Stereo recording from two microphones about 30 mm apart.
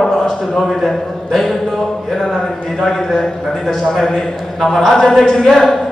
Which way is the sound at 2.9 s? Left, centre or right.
Centre.